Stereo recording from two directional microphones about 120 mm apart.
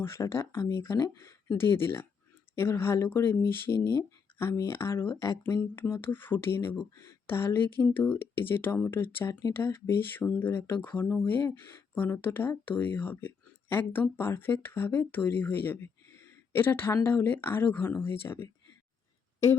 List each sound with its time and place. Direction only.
0.0 s speech: 20° left (ahead or behind)